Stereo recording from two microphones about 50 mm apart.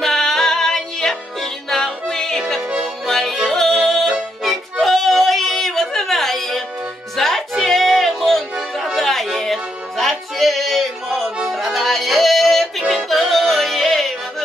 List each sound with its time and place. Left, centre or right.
0.0 s music: centre